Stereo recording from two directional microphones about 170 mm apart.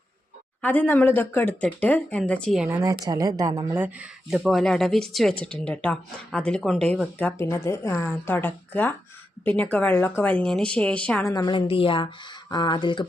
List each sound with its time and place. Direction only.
0.6 s speech: 10° left (ahead or behind)
2.8 s speech: 20° right (ahead or behind)
3.8 s speech: 10° right (ahead or behind); by 11.3 s 5° left (ahead or behind)
11.3 s a woman's voice: 20° left (ahead or behind)